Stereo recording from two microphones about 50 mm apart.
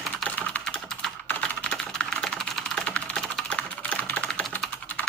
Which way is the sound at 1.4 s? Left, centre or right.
Centre.